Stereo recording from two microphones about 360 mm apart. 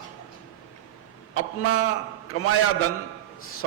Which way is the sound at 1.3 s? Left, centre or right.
Left.